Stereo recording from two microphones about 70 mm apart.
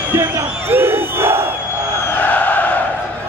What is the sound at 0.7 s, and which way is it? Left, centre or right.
Crowd, right.